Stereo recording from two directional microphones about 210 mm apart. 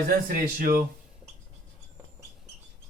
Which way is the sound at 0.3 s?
45° right (ahead or behind).